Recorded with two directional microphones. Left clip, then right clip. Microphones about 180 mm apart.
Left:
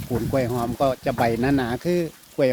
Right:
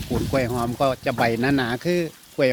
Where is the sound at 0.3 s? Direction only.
15° left (ahead or behind).